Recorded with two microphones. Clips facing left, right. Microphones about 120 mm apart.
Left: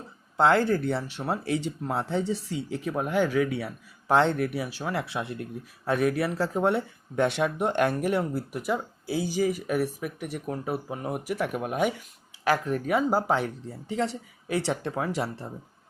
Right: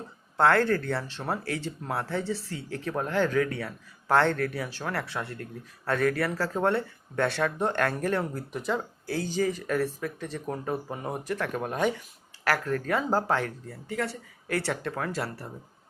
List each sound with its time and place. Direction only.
0.3 s speech: 15° left (ahead or behind)